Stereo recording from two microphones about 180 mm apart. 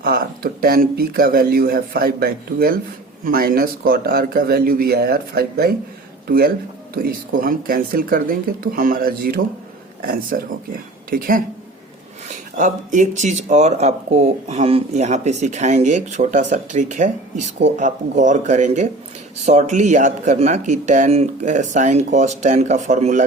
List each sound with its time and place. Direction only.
0.0 s speech: 55° right (ahead or behind)